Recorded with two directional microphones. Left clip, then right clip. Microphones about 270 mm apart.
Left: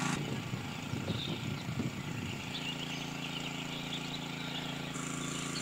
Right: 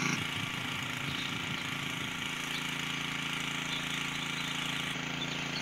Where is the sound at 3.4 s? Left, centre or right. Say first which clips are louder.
Right 5 dB; left.